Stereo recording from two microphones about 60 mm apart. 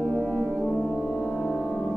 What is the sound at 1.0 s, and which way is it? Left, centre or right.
Music, centre.